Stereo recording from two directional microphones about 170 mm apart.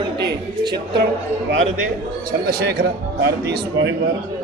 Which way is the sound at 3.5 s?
75° right (ahead or behind).